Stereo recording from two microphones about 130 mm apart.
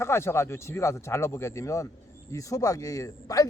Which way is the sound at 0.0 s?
20° left (ahead or behind).